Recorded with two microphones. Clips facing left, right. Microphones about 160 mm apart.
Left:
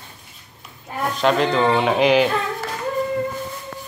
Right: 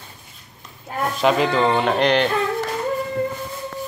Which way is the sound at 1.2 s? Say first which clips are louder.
Even; 5° right (ahead or behind).